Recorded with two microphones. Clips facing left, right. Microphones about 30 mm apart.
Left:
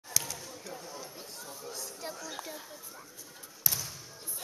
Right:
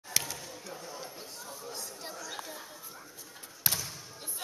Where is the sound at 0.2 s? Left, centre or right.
Centre.